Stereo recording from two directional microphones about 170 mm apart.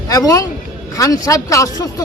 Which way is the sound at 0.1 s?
20° left (ahead or behind).